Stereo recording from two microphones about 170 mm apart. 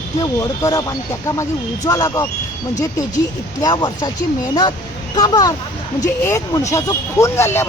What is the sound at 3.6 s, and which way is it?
Speech, 25° left (ahead or behind).